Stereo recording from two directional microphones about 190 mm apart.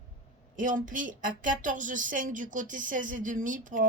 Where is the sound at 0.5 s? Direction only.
45° right (ahead or behind).